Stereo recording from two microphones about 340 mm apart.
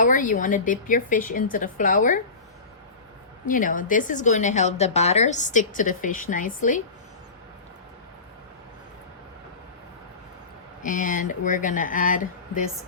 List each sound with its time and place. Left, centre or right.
0.0 s a woman's voice: left
3.4 s a woman's voice: left
10.8 s a woman's voice: left